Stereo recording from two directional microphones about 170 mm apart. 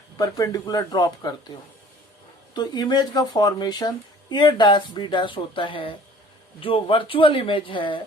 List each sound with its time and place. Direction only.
0.2 s speech: 20° left (ahead or behind)